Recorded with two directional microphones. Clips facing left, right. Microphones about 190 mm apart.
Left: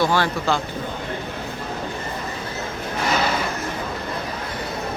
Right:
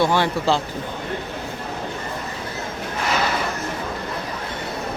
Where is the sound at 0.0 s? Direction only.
25° right (ahead or behind).